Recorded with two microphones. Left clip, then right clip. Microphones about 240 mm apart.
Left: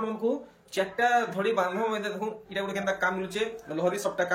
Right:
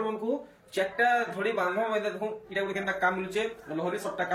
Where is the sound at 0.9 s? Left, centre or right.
Centre.